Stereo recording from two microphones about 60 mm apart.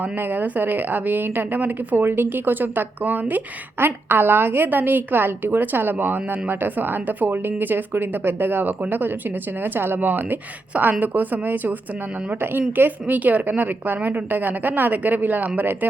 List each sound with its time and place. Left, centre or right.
0.0 s a woman's voice: right